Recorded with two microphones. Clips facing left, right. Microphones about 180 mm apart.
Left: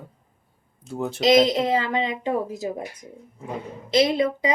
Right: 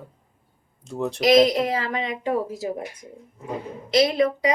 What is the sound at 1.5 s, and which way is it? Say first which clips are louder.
A woman's voice: left 1 dB; 25° left (ahead or behind).